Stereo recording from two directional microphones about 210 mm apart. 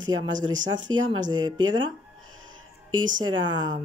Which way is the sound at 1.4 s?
20° right (ahead or behind).